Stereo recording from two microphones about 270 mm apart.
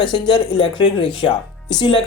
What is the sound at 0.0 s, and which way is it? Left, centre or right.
A woman's voice, centre.